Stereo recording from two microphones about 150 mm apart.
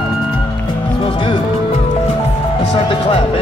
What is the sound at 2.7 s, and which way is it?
Music, 35° left (ahead or behind).